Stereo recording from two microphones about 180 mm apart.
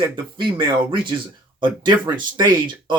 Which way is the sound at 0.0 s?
30° right (ahead or behind).